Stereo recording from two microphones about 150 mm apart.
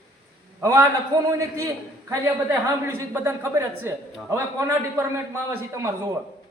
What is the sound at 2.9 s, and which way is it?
A woman's voice, 15° right (ahead or behind).